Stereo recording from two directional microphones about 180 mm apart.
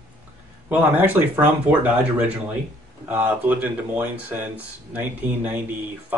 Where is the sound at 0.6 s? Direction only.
10° right (ahead or behind).